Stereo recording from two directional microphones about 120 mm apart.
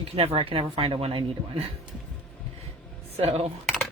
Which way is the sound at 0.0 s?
55° right (ahead or behind).